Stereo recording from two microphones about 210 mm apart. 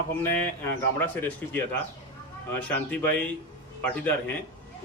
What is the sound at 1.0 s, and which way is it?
Speech, 10° left (ahead or behind).